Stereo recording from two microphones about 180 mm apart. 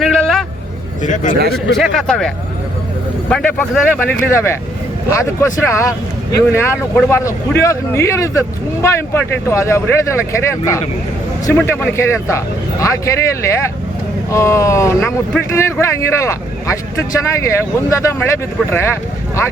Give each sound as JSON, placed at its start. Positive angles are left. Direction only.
{"t": 0.0, "sound": "vehicle", "side_deg": 5}
{"t": 1.0, "sound": "a man's voice", "side_deg": 45}
{"t": 1.7, "sound": "speech", "side_deg": 0}
{"t": 5.1, "sound": "speech", "side_deg": 15}